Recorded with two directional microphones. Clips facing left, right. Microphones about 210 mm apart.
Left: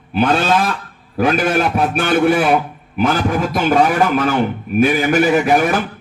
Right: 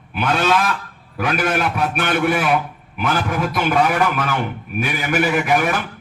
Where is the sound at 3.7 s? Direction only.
35° left (ahead or behind).